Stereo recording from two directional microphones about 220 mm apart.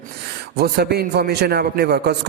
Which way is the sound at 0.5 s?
45° right (ahead or behind).